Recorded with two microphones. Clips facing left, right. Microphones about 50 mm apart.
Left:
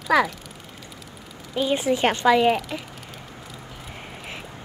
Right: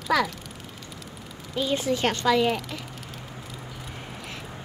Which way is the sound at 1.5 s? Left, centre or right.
Centre.